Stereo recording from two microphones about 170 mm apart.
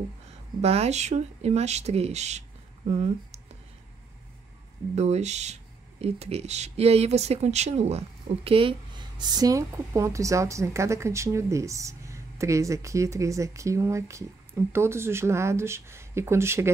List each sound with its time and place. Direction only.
0.6 s speech: 35° right (ahead or behind)
4.9 s speech: 40° right (ahead or behind); by 16.7 s 15° right (ahead or behind)